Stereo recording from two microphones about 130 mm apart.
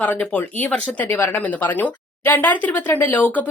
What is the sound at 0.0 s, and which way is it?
Speech, 10° left (ahead or behind).